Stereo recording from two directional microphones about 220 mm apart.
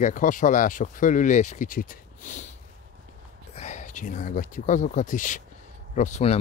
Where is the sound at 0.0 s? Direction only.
35° left (ahead or behind).